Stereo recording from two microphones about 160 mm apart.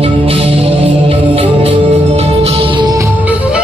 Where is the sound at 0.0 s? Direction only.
35° right (ahead or behind).